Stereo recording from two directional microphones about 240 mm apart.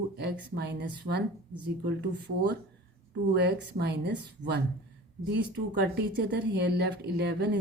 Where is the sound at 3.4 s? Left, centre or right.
Right.